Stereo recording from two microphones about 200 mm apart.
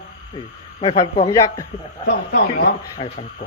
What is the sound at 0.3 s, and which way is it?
Speech, 25° left (ahead or behind).